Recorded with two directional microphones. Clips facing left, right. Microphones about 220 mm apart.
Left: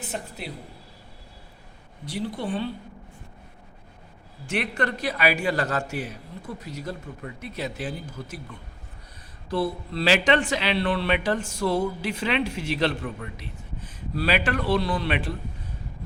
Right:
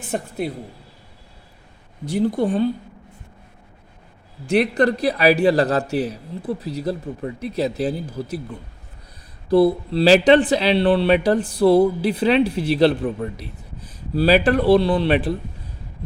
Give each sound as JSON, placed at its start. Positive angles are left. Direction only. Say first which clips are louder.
{"t": 0.1, "sound": "speech", "louder": "right 12 dB", "side_deg": -50}
{"t": 2.1, "sound": "speech", "louder": "right 10 dB", "side_deg": -45}
{"t": 4.4, "sound": "speech", "louder": "right 10 dB", "side_deg": -35}